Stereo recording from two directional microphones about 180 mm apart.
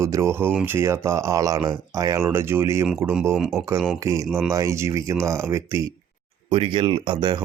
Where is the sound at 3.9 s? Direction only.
15° right (ahead or behind).